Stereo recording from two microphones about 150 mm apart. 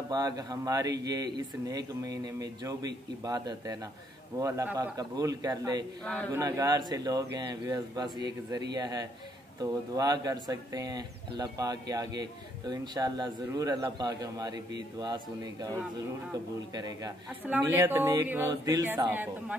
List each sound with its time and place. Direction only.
0.1 s speech: 25° right (ahead or behind)
6.0 s speech: 10° left (ahead or behind)
6.3 s speech: 20° right (ahead or behind)
16.7 s speech: 25° right (ahead or behind)
17.5 s speech: 15° right (ahead or behind)